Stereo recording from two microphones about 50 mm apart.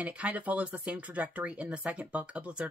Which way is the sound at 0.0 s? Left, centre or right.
Right.